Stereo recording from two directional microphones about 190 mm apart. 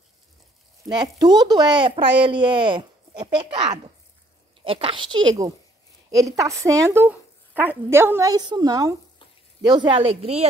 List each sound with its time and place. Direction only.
0.8 s speech: 20° right (ahead or behind)